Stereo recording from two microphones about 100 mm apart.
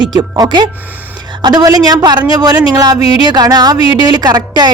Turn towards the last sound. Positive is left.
turn(degrees=-40)  # may be behind; listen again after turning